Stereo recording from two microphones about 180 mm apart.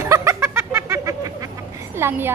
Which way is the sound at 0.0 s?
15° right (ahead or behind).